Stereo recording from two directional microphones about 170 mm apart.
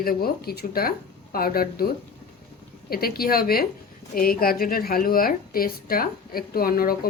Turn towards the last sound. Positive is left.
turn(degrees=60)  # may be behind; listen again after turning